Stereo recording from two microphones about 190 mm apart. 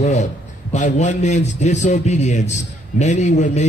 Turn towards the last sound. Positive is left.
turn(degrees=40)  # may be behind; listen again after turning